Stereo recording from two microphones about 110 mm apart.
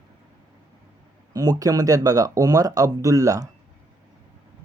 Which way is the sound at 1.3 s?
35° right (ahead or behind).